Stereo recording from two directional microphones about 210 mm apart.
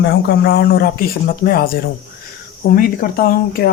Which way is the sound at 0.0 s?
50° left (ahead or behind).